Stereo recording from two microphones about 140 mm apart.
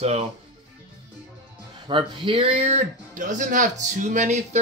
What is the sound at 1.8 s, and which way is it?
Speech, 35° right (ahead or behind).